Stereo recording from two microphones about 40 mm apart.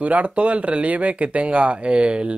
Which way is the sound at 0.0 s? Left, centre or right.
Right.